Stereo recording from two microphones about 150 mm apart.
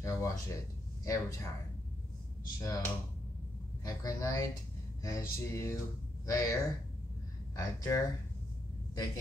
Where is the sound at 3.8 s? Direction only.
20° left (ahead or behind).